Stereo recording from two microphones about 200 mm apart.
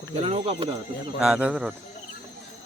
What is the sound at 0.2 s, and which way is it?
Speech, 30° right (ahead or behind).